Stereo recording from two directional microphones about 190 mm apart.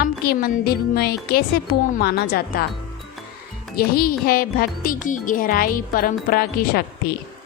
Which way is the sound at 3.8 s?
50° left (ahead or behind).